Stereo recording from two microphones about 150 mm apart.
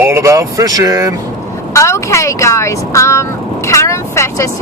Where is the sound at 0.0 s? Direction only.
20° right (ahead or behind).